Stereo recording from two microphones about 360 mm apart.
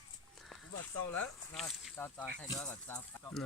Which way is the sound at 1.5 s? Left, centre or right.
Centre.